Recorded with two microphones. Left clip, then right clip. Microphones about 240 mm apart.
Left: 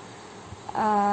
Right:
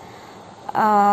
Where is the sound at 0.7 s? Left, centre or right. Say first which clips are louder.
Right 7 dB; right.